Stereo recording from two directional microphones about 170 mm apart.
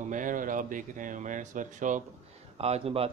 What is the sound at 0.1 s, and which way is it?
Speech, 50° right (ahead or behind).